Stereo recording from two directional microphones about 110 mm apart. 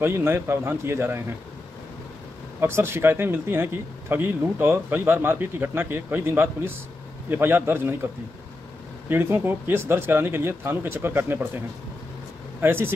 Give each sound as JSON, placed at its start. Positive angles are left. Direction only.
{"t": 0.0, "sound": "speech", "side_deg": -20}
{"t": 2.6, "sound": "speech", "side_deg": -25}
{"t": 9.1, "sound": "speech", "side_deg": -20}
{"t": 12.6, "sound": "speech", "side_deg": -20}